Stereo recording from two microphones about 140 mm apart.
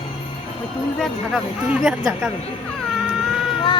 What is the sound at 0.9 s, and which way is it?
A woman's voice, 5° left (ahead or behind).